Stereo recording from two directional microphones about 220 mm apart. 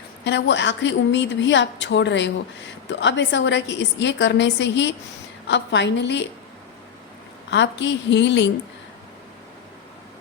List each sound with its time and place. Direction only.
0.3 s a woman's voice: 55° left (ahead or behind)
7.5 s a woman's voice: 55° left (ahead or behind)